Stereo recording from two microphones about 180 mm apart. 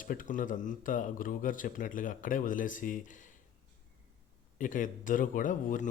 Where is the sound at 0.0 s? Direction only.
50° left (ahead or behind).